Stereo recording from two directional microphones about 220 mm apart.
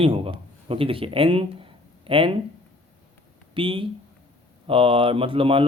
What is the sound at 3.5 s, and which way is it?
A man's voice, 25° right (ahead or behind).